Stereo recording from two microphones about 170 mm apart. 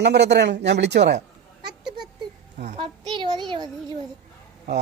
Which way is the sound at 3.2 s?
25° right (ahead or behind).